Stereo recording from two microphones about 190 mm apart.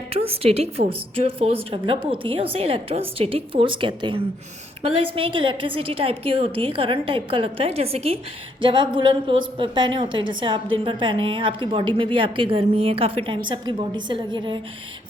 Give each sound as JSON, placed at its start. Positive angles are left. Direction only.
{"t": 0.1, "sound": "a woman's voice", "side_deg": -30}